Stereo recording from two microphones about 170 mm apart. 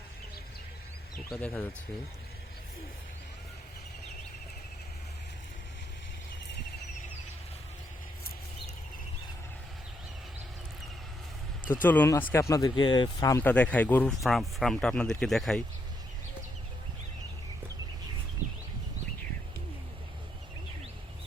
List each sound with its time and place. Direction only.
1.3 s speech: 5° left (ahead or behind)
11.7 s speech: 10° left (ahead or behind)
13.4 s speech: 10° left (ahead or behind)